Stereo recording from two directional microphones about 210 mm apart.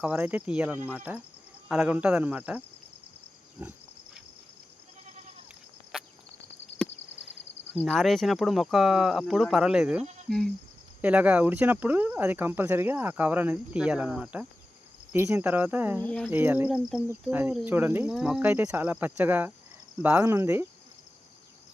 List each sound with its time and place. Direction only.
0.0 s speech: 5° right (ahead or behind)
6.7 s a sound: 60° left (ahead or behind)
7.7 s speech: 5° left (ahead or behind)
16.0 s speech: 5° left (ahead or behind)
16.3 s speech: 10° right (ahead or behind)